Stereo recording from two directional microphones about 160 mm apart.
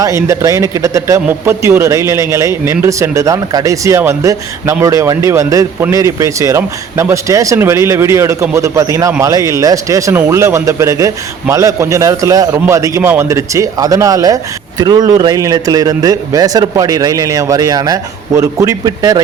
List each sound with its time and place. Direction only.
0.0 s speech: 20° right (ahead or behind)